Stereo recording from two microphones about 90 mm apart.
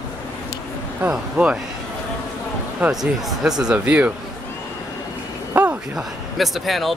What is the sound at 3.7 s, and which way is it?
Speech, 15° right (ahead or behind).